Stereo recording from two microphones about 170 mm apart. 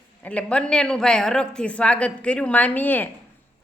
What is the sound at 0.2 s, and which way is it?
A woman's voice, 10° left (ahead or behind).